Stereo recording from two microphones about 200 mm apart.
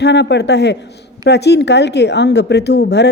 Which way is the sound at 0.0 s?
60° left (ahead or behind).